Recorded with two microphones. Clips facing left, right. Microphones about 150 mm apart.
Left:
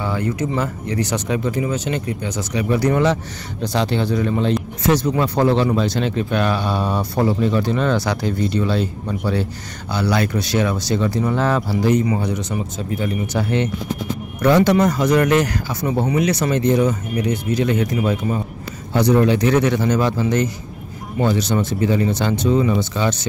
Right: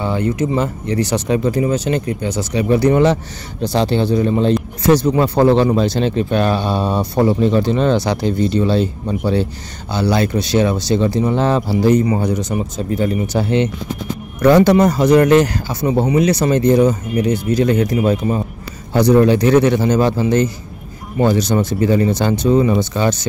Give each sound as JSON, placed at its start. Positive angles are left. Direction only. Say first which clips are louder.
{"t": 0.0, "sound": "speech", "louder": "right 4 dB", "side_deg": -25}
{"t": 14.4, "sound": "speech", "louder": "right 4 dB", "side_deg": -40}